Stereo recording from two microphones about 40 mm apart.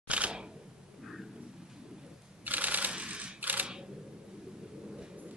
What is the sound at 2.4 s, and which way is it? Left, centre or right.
Camera, right.